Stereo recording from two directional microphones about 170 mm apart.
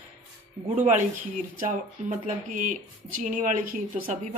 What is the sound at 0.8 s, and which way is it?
Speech, 45° right (ahead or behind).